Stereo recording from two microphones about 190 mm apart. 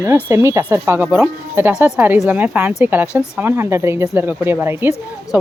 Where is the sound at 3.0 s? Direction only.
15° left (ahead or behind).